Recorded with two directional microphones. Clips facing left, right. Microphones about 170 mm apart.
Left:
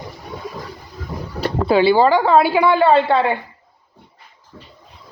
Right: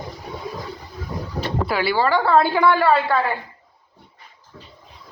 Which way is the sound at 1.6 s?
25° left (ahead or behind).